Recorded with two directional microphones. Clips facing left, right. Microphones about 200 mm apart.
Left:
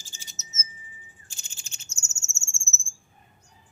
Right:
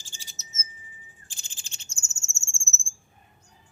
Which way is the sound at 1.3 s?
30° right (ahead or behind).